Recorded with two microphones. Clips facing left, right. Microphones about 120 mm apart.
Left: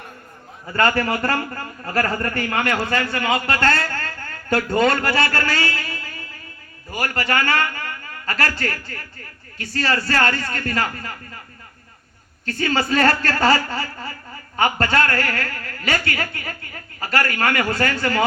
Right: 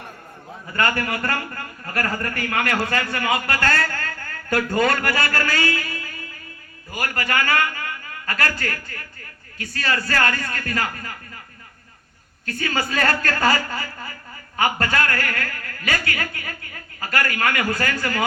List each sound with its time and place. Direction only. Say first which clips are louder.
0.8 s a man's voice: left 4 dB; 30° left (ahead or behind)
12.5 s a woman's voice: left 4 dB; 30° left (ahead or behind)